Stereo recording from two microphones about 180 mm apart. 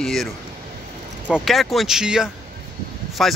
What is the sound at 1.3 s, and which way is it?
Speech, centre (ahead or behind).